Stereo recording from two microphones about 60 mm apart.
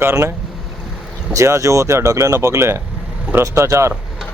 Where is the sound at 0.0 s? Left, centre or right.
Right.